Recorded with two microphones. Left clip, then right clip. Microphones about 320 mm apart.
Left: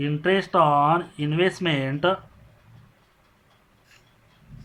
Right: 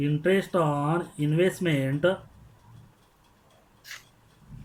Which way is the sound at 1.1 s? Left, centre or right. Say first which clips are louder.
Left 2 dB; centre.